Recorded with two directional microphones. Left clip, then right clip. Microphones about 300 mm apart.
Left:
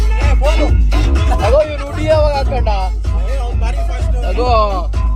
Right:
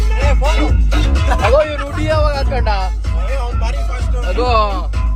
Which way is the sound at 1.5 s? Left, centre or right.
Centre.